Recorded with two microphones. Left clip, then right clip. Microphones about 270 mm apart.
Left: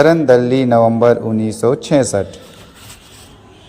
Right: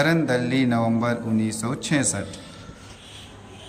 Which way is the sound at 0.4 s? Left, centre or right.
Centre.